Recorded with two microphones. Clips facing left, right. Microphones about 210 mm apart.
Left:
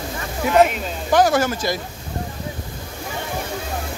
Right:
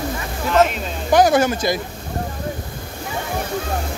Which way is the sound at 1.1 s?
20° right (ahead or behind).